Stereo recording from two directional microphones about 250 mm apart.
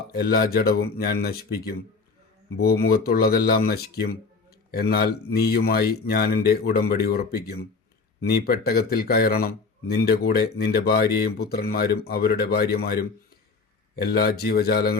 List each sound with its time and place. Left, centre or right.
0.1 s speech: left